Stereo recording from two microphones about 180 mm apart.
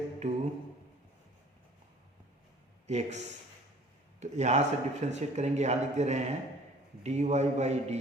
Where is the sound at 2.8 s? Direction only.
40° right (ahead or behind).